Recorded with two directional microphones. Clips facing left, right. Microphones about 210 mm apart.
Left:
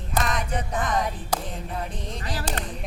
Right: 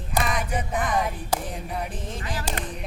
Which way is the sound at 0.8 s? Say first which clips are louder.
Right 1 dB; centre (ahead or behind).